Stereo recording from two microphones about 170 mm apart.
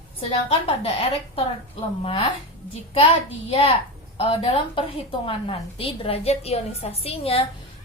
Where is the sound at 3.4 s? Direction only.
30° left (ahead or behind).